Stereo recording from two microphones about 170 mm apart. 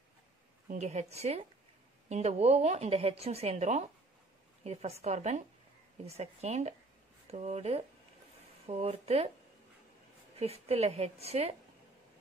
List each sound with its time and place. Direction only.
0.7 s speech: 45° right (ahead or behind)
10.3 s speech: 35° right (ahead or behind)